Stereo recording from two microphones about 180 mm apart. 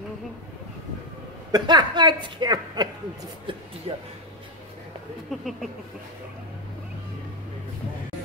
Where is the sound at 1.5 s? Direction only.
25° right (ahead or behind).